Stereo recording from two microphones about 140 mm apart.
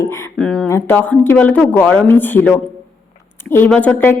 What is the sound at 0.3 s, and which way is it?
Speech, centre (ahead or behind).